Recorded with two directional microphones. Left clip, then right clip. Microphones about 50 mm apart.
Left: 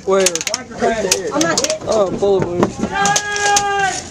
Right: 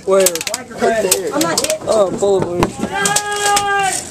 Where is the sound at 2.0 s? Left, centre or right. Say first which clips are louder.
Even; centre.